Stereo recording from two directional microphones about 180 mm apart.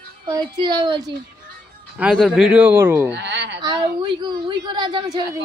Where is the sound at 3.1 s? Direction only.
80° right.